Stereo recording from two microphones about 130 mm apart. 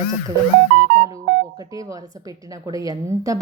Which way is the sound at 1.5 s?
25° right (ahead or behind).